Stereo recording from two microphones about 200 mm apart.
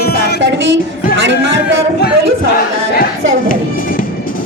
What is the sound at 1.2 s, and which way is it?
Speech, 65° right (ahead or behind).